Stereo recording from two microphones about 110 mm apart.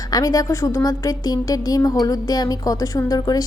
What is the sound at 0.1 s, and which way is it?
A woman's voice, 35° left (ahead or behind).